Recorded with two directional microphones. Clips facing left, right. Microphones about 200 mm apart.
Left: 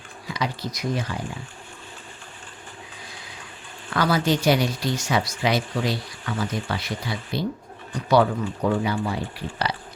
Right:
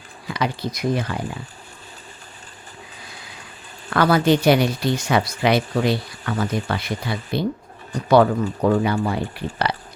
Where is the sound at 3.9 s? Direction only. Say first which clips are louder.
Right 5 dB; 60° right (ahead or behind).